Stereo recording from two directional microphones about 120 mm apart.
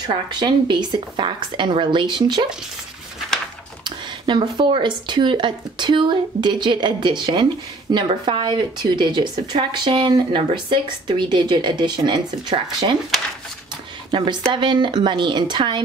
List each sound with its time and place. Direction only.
0.0 s speech: 40° right (ahead or behind)
3.8 s speech: 40° right (ahead or behind)
14.1 s speech: 40° right (ahead or behind)